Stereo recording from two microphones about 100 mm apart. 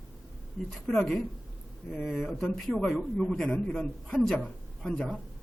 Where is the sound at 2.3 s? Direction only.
15° left (ahead or behind).